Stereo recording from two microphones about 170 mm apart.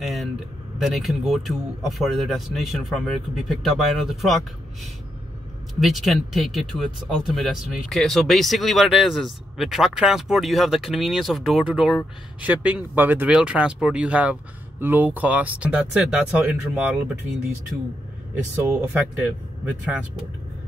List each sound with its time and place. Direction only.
0.0 s speech: centre (ahead or behind)
5.8 s speech: centre (ahead or behind)
18.6 s speech: 10° right (ahead or behind)